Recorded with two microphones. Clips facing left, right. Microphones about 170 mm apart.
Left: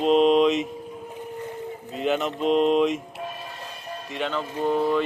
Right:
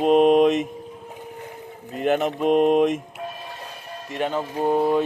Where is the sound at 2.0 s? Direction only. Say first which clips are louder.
Right 3 dB; 50° right (ahead or behind).